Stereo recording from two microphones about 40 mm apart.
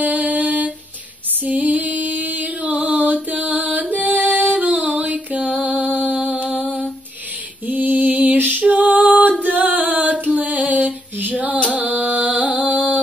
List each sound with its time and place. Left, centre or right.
0.0 s music: right
1.4 s female singing: right
3.0 s mantra: right
3.9 s female singing: right
4.7 s a sound: right
5.0 s music: right
5.5 s mantra: right
7.6 s a sound: right
8.5 s female singing: right
9.4 s singing: right
10.2 s music: right
11.8 s carnatic music: right